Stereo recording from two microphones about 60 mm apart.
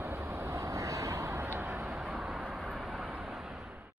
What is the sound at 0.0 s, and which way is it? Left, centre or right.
Vehicle, right.